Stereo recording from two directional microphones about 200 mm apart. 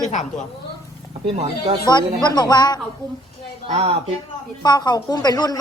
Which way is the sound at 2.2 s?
20° left (ahead or behind).